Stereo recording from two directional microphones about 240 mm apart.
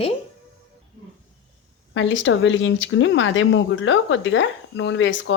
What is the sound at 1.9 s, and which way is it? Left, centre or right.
Speech, left.